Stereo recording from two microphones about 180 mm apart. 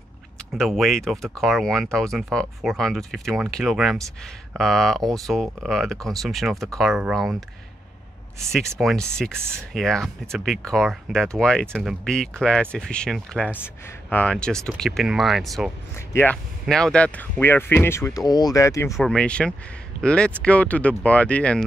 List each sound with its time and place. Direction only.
0.6 s speech: centre (ahead or behind); by 18.9 s 15° left (ahead or behind)
18.9 s speech: 5° left (ahead or behind)